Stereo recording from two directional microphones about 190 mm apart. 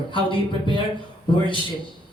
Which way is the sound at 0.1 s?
25° left (ahead or behind).